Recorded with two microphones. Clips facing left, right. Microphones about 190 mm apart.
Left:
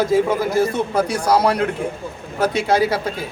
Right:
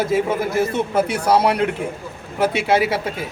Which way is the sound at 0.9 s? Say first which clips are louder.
Even; 25° right (ahead or behind).